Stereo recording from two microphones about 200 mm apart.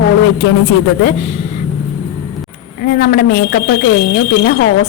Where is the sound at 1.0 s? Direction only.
35° left (ahead or behind).